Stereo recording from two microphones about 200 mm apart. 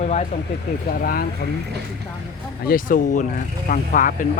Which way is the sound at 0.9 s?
50° left (ahead or behind).